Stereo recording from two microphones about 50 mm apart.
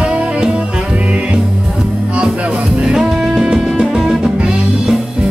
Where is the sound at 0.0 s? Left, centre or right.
Right.